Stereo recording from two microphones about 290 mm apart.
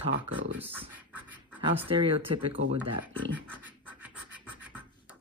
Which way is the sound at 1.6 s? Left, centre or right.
Centre.